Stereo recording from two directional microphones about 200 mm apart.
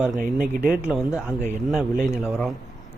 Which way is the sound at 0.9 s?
5° right (ahead or behind).